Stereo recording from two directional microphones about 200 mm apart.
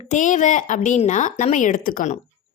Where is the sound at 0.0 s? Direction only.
35° left (ahead or behind).